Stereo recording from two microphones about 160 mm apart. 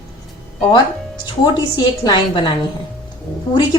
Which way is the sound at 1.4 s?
25° left (ahead or behind).